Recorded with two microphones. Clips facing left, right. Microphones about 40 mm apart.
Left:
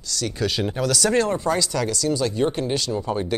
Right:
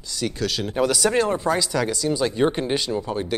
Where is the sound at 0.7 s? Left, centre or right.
Centre.